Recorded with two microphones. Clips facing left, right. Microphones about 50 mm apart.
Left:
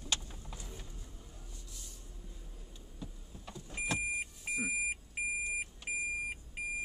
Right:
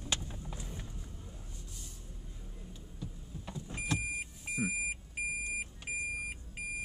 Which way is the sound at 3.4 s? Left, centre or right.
Centre.